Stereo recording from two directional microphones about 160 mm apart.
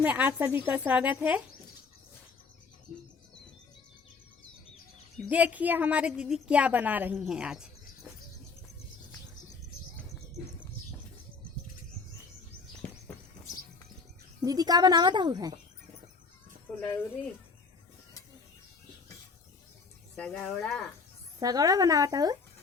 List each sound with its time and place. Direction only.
0.0 s a woman's voice: 10° right (ahead or behind)
5.3 s a woman's voice: 10° right (ahead or behind)
14.4 s speech: 25° right (ahead or behind)
20.1 s speech: 10° left (ahead or behind)
21.3 s speech: 20° right (ahead or behind)